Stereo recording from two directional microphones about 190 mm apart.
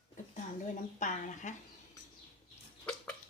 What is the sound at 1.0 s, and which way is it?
Speech, 40° left (ahead or behind).